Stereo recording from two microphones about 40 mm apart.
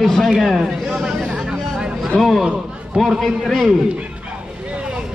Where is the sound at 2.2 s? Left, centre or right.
Centre.